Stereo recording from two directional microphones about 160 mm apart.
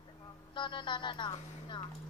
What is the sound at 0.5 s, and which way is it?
A woman's voice, 30° left (ahead or behind).